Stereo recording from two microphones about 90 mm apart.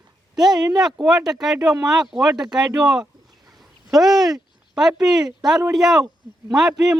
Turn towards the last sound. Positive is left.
turn(degrees=-5)  # may be behind; listen again after turning